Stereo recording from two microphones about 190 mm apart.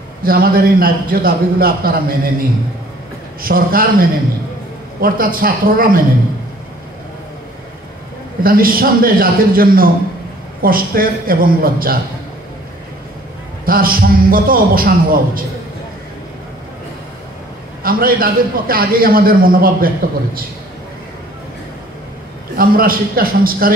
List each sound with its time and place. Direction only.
0.2 s a man's voice: 50° right (ahead or behind)
3.4 s a man's voice: 50° right (ahead or behind)
8.4 s a man's voice: 50° right (ahead or behind)
13.7 s a man's voice: 50° right (ahead or behind)
17.8 s a man's voice: 50° right (ahead or behind)
22.6 s a man's voice: 50° right (ahead or behind)